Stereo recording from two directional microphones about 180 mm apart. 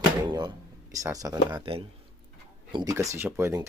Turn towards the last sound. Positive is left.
turn(degrees=-15)  # may be behind; listen again after turning